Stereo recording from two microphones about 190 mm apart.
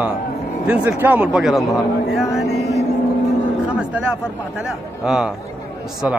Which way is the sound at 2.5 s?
60° left (ahead or behind).